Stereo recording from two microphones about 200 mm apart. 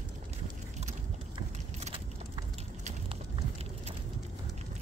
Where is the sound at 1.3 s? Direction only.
30° right (ahead or behind).